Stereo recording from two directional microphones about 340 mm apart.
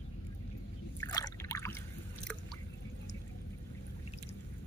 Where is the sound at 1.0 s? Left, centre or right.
Centre.